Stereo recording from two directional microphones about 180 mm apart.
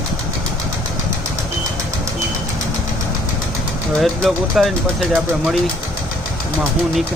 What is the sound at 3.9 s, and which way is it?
Speech, centre (ahead or behind).